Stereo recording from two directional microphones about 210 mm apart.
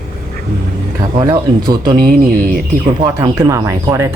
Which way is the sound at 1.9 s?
45° right (ahead or behind).